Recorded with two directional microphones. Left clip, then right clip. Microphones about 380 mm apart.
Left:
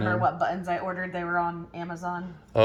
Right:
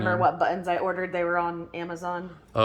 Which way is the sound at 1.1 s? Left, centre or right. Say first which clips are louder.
Left 1 dB; right.